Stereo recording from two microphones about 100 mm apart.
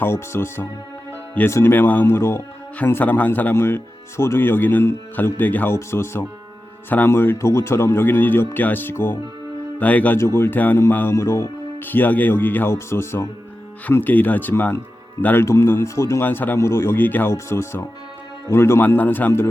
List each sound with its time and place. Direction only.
0.0 s speech: 25° left (ahead or behind)
10.2 s speech: 25° left (ahead or behind)
11.9 s speech: 20° left (ahead or behind)
16.2 s speech: 20° left (ahead or behind)